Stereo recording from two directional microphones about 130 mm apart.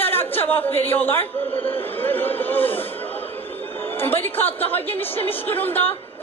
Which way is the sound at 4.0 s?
15° left (ahead or behind).